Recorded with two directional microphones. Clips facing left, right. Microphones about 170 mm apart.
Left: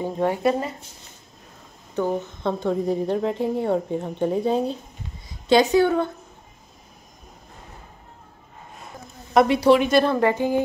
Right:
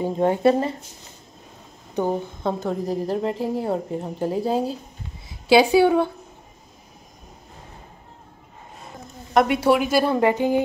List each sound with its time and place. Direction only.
0.0 s speech: 20° right (ahead or behind)
2.0 s speech: 15° right (ahead or behind)
2.4 s a woman's voice: centre (ahead or behind)
9.3 s a woman's voice: centre (ahead or behind); by 10.6 s 15° right (ahead or behind)